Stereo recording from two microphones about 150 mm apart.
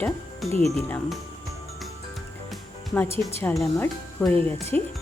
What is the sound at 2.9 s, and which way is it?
Speech, 15° left (ahead or behind).